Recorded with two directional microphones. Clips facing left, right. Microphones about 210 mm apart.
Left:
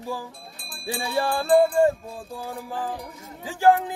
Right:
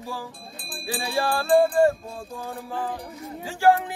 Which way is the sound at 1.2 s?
20° left (ahead or behind).